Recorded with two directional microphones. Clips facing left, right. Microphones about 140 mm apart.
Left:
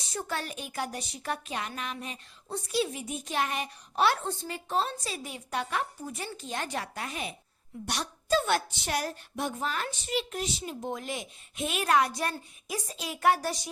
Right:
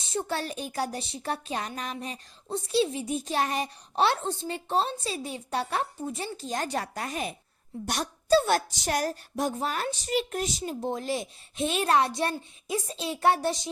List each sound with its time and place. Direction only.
0.0 s a woman's voice: 25° right (ahead or behind)